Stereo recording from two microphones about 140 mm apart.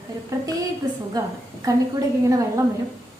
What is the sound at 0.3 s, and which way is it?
Speech, 25° right (ahead or behind).